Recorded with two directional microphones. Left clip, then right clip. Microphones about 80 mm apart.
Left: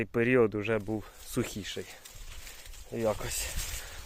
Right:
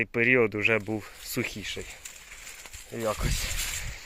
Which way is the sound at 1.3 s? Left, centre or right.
Left.